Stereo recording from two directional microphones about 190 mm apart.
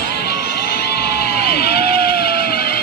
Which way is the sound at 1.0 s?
55° left (ahead or behind).